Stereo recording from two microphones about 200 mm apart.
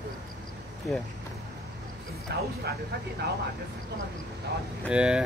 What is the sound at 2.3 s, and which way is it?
Speech, 50° right (ahead or behind).